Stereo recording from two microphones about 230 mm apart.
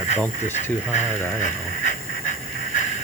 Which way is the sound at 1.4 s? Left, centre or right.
Left.